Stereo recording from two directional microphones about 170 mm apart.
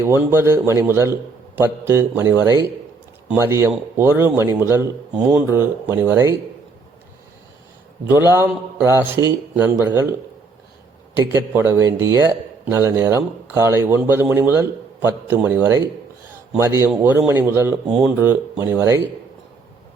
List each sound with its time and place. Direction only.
0.0 s a man's voice: 15° right (ahead or behind)
8.1 s a man's voice: 15° right (ahead or behind)
16.3 s a sound: 15° right (ahead or behind)
17.0 s a man's voice: 15° right (ahead or behind)